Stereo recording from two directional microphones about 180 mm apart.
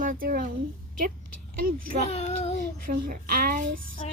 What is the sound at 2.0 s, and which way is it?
Child singing, 35° left (ahead or behind).